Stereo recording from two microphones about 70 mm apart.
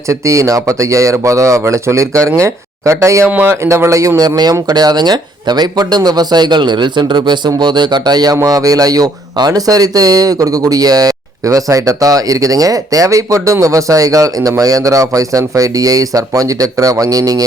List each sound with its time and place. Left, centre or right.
0.1 s speech: right
3.2 s speech: right
3.6 s speech: right
4.2 s speech: right
8.4 s speech: right